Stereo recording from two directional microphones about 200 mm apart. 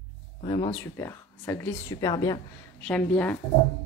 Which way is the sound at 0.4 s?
25° left (ahead or behind).